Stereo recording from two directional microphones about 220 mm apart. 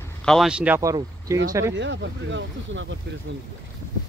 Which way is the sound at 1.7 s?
55° right (ahead or behind).